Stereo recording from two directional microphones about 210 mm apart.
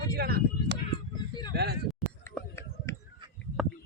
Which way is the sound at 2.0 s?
Centre (ahead or behind).